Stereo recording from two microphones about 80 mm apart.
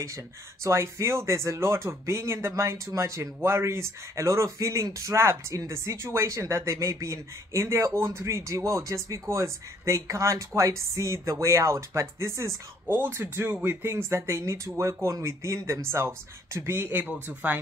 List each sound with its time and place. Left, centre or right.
0.7 s speech: right
12.8 s speech: right